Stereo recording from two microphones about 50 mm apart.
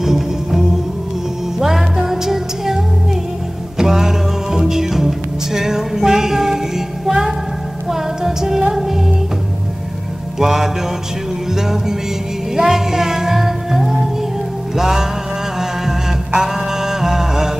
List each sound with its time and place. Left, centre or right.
0.0 s music: centre
10.4 s mantra: centre
11.5 s music: centre
16.3 s music: centre